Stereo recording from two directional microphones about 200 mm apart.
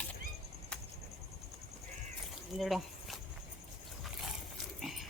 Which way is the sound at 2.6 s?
Centre (ahead or behind).